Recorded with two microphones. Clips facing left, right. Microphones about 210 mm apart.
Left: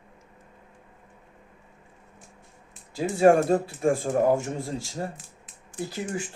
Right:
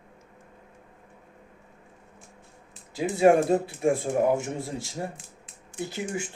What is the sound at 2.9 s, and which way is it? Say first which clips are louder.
Speech: left 1 dB; 20° right (ahead or behind).